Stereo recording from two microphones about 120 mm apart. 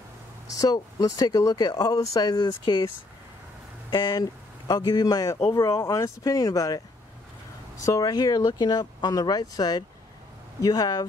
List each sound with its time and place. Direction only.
0.5 s speech: 30° left (ahead or behind)
3.9 s speech: 35° left (ahead or behind)
7.8 s speech: 30° left (ahead or behind)